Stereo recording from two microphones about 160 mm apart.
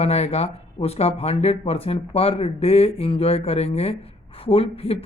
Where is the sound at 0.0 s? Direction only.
40° left (ahead or behind).